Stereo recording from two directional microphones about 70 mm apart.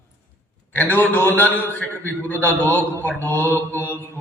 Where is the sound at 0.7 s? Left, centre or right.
Left.